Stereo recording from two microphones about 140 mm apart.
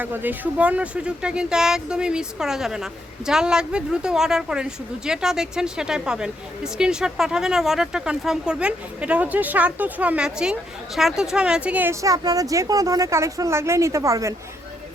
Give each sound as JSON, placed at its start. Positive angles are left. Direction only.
{"t": 0.0, "sound": "speech", "side_deg": -15}